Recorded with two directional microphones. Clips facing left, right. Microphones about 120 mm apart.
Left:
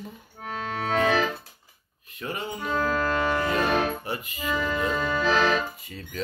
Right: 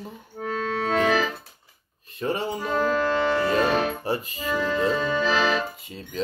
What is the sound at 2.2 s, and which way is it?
Music, 30° right (ahead or behind).